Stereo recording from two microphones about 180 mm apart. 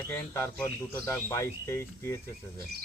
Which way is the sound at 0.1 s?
15° left (ahead or behind).